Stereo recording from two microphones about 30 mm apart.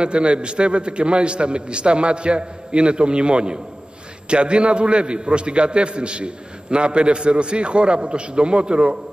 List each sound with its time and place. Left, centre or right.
0.0 s a man's voice: right